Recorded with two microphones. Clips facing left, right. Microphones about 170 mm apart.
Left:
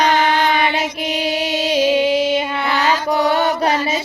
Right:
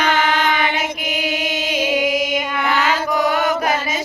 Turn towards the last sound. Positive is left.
turn(degrees=30)  # may be behind; listen again after turning